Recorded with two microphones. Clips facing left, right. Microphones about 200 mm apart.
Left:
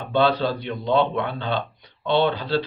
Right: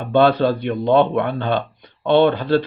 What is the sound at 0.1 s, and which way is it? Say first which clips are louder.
Speech: right 6 dB; 55° right (ahead or behind).